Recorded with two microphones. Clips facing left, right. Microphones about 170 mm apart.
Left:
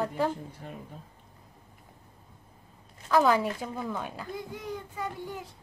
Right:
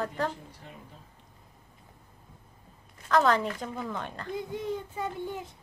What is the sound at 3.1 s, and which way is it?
A woman's voice, 5° left (ahead or behind).